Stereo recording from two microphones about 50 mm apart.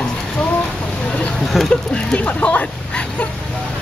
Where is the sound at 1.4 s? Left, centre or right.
Centre; by 3.3 s left.